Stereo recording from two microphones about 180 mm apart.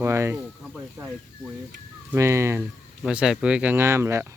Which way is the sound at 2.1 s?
15° right (ahead or behind).